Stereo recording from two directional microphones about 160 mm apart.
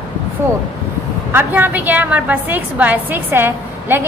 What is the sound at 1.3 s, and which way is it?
A woman's voice, 10° right (ahead or behind).